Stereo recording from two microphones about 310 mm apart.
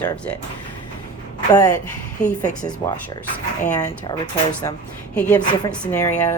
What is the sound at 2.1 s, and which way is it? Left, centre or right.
Speech, left.